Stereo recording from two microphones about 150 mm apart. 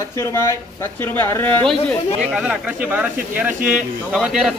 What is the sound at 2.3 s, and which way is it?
Speech, 5° right (ahead or behind).